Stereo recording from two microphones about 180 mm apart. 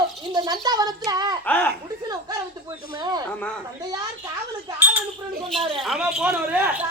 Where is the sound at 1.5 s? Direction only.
10° left (ahead or behind).